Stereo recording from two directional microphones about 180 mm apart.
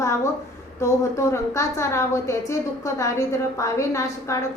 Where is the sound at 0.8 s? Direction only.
15° left (ahead or behind).